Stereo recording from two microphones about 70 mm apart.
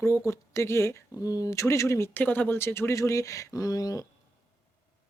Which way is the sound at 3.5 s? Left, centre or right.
Left.